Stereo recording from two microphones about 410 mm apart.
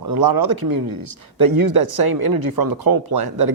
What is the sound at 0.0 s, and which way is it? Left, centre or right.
Speech, right.